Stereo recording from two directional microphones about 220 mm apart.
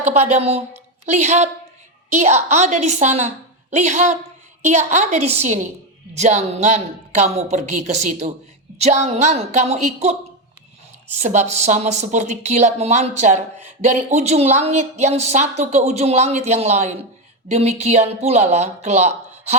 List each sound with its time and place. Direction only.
0.0 s a woman's voice: 30° right (ahead or behind)
11.2 s a woman's voice: 30° right (ahead or behind)